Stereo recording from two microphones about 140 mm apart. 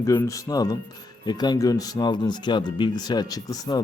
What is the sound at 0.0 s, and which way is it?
Speech, 20° left (ahead or behind).